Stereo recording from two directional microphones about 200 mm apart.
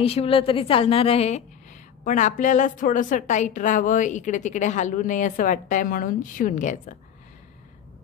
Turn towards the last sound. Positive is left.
turn(degrees=40)  # may be behind; listen again after turning